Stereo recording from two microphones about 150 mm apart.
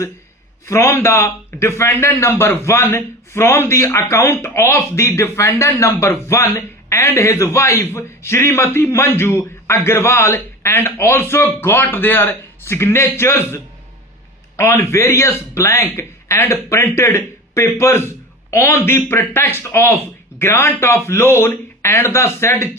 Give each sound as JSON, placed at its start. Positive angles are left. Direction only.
{"t": 0.7, "sound": "a man's voice", "side_deg": 20}